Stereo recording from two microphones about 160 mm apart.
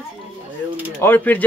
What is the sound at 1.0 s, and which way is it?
Speech, 10° left (ahead or behind).